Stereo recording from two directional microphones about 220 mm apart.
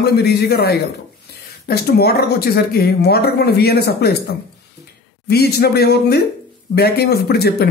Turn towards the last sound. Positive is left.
turn(degrees=45)  # may be behind; listen again after turning